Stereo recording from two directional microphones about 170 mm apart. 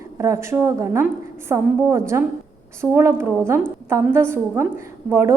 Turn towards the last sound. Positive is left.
turn(degrees=-15)  # may be behind; listen again after turning